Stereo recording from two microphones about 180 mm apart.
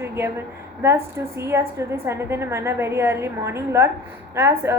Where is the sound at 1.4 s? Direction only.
15° right (ahead or behind).